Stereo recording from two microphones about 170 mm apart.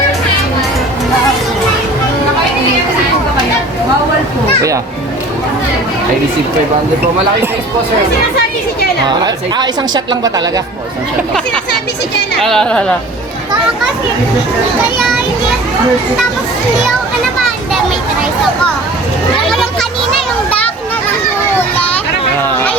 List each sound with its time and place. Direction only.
9.0 s speech: 25° right (ahead or behind)
12.4 s speech: 5° left (ahead or behind)
21.8 s children playing: 10° left (ahead or behind)